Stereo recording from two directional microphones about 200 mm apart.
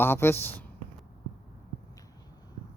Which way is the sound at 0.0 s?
10° left (ahead or behind).